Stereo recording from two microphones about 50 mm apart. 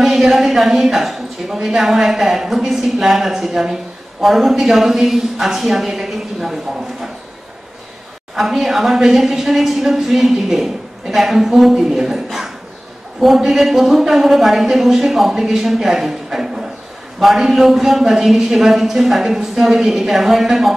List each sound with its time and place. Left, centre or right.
0.0 s a woman's voice: centre
8.4 s a woman's voice: centre
12.3 s a sound: centre
13.2 s a woman's voice: centre